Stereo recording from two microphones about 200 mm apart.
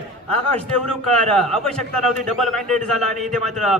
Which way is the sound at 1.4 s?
Centre (ahead or behind).